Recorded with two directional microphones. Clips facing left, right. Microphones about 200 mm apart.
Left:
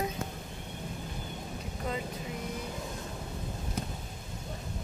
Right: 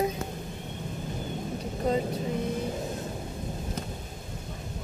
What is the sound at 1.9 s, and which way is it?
Speech, 35° right (ahead or behind).